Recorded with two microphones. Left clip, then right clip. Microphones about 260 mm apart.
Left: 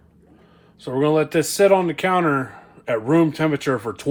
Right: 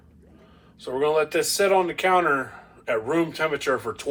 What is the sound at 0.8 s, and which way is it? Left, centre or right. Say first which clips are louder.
Speech: left 3 dB; left.